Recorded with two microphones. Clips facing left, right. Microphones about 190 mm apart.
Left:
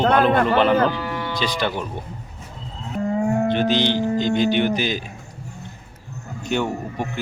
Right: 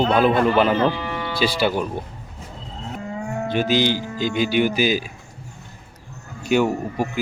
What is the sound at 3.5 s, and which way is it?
Speech, 10° right (ahead or behind).